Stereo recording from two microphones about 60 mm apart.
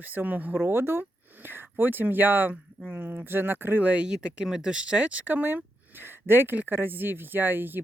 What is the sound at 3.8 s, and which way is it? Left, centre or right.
Speech, right.